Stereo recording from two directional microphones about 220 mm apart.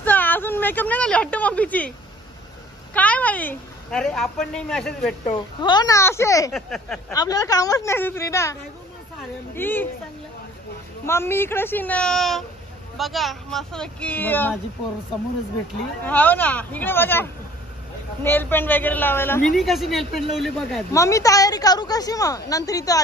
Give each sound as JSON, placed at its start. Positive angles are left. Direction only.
{"t": 0.0, "sound": "a woman's voice", "side_deg": 10}
{"t": 2.9, "sound": "a woman's voice", "side_deg": 5}
{"t": 5.2, "sound": "a woman's voice", "side_deg": 20}
{"t": 6.5, "sound": "speech", "side_deg": 0}
{"t": 7.1, "sound": "a woman's voice", "side_deg": 15}
{"t": 9.6, "sound": "a woman's voice", "side_deg": 10}
{"t": 11.1, "sound": "a woman's voice", "side_deg": 10}
{"t": 16.0, "sound": "a woman's voice", "side_deg": 10}
{"t": 19.5, "sound": "speech", "side_deg": 0}
{"t": 20.9, "sound": "a woman's voice", "side_deg": 15}